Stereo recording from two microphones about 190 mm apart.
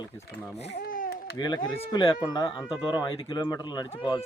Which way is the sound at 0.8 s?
45° left (ahead or behind).